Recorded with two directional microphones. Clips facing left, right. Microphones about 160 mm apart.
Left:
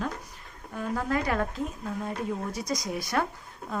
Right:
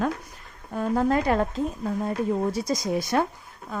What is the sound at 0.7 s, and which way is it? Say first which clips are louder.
Speech: right 6 dB; 35° right (ahead or behind).